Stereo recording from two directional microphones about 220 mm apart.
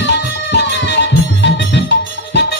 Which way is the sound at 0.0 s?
55° left (ahead or behind).